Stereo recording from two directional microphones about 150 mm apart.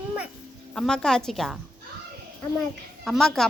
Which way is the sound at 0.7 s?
5° left (ahead or behind).